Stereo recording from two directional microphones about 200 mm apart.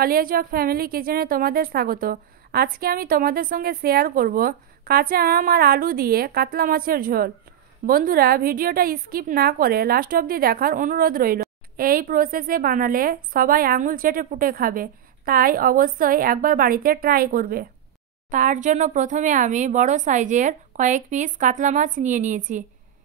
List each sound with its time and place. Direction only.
0.0 s a woman's voice: 45° right (ahead or behind)